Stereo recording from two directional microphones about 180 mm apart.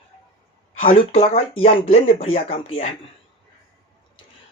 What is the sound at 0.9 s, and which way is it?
Speech, 35° left (ahead or behind).